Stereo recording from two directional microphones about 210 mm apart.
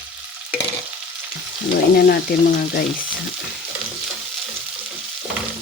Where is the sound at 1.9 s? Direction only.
45° left (ahead or behind).